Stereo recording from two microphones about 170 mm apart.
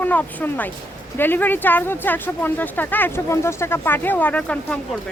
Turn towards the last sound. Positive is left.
turn(degrees=5)  # may be behind; listen again after turning